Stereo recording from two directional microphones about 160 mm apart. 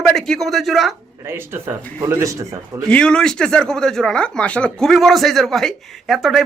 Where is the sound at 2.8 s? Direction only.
5° left (ahead or behind).